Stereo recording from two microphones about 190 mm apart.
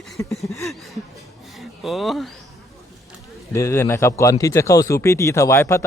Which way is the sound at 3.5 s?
15° left (ahead or behind).